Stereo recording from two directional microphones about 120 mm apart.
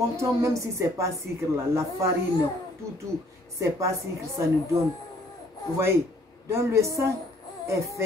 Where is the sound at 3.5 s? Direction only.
25° right (ahead or behind).